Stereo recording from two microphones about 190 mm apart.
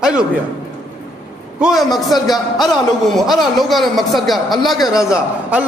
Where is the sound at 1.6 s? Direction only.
Centre (ahead or behind).